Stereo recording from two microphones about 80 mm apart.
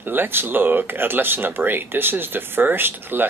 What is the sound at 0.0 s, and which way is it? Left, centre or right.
Speech, right.